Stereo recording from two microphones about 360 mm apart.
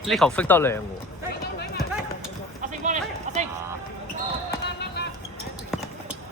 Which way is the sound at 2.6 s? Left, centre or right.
Right.